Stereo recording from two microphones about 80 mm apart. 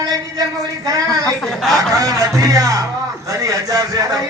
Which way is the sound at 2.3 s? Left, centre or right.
Right.